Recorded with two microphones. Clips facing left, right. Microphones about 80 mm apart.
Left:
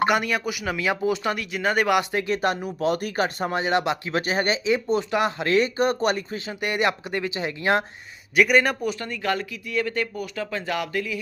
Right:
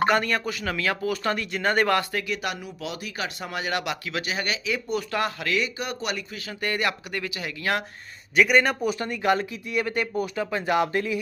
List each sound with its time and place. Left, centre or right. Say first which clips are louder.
0.1 s speech: even; centre
2.2 s speech: left 6 dB; left
3.6 s speech: left 4 dB; left
5.5 s speech: left 7 dB; left
8.4 s a man's voice: left 1 dB; centre
8.9 s speech: right 3 dB; centre